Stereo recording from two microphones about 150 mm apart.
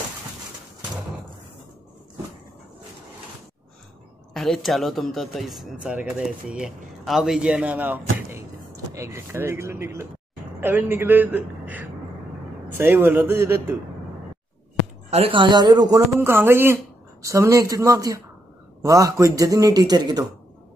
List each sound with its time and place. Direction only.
4.3 s a man's voice: centre (ahead or behind); by 13.7 s 15° right (ahead or behind)
15.0 s speech: 40° right (ahead or behind)
16.2 s speech: 15° right (ahead or behind)